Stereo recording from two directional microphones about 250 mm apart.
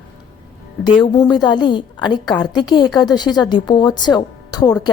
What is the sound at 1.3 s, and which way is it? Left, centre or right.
A woman's voice, centre.